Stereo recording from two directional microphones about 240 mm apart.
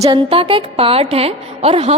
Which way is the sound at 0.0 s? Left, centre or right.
Right.